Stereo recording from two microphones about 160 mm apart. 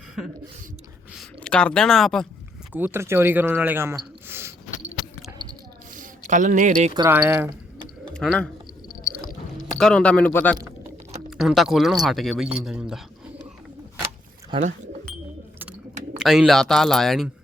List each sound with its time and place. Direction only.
1.4 s speech: 5° left (ahead or behind)
2.7 s speech: 15° right (ahead or behind)
6.0 s speech: 50° right (ahead or behind)
7.1 s speech: 10° right (ahead or behind)
8.1 s speech: 5° left (ahead or behind)
9.7 s speech: 5° left (ahead or behind)
11.3 s speech: centre (ahead or behind)
16.1 s speech: centre (ahead or behind)